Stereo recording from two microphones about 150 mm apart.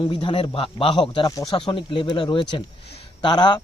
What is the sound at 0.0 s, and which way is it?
Speech, 30° left (ahead or behind).